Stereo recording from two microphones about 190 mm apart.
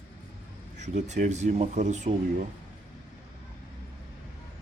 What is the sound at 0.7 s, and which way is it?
Speech, 40° right (ahead or behind).